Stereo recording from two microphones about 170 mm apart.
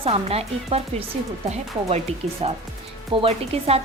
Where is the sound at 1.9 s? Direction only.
35° right (ahead or behind).